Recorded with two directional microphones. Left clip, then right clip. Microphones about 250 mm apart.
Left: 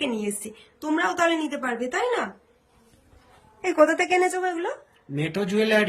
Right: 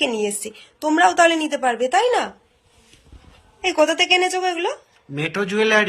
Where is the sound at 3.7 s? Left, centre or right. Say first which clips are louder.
Right 3 dB; centre.